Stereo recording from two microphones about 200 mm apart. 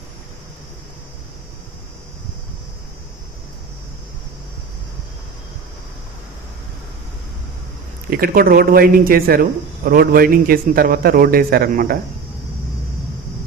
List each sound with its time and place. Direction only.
8.1 s speech: 45° right (ahead or behind)